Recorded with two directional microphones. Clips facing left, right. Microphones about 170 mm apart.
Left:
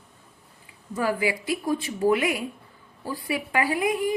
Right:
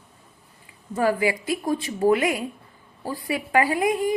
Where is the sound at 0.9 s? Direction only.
45° right (ahead or behind).